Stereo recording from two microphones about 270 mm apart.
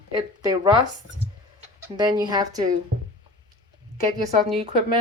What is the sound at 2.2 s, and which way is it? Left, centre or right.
Speech, centre.